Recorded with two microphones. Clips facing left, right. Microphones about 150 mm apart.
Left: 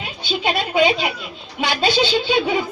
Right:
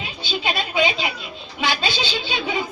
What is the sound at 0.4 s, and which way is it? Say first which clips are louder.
A woman's voice: left 5 dB; 50° left (ahead or behind).